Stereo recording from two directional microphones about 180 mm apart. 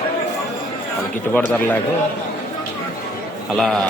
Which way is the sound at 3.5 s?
Centre (ahead or behind).